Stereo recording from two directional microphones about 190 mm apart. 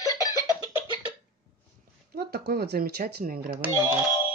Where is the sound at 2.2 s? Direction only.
55° right (ahead or behind).